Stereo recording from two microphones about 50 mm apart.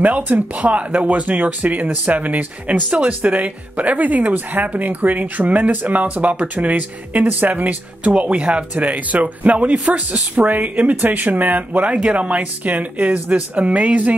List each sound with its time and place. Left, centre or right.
0.0 s speech: right